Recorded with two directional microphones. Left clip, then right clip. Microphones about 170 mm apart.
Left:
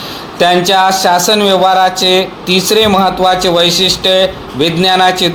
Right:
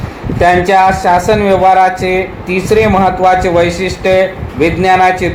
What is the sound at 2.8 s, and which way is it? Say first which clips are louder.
Speech: even; 50° left (ahead or behind).